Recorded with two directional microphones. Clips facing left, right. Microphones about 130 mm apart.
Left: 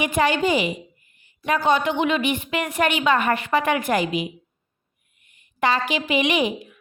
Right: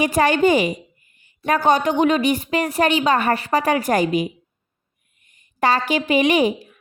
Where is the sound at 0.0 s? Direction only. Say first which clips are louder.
Right 4 dB; 40° right (ahead or behind).